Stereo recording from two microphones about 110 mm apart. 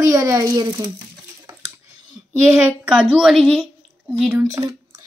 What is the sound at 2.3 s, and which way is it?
Speech, 25° right (ahead or behind).